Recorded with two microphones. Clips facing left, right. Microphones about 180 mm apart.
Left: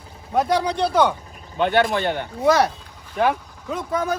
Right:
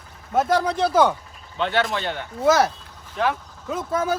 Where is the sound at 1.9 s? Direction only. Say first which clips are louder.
Left 5 dB; 50° left (ahead or behind).